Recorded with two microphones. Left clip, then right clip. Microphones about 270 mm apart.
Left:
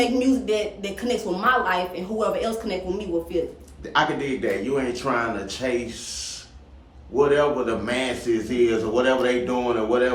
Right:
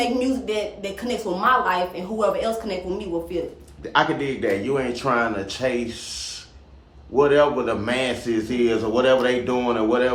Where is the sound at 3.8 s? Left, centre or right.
Right.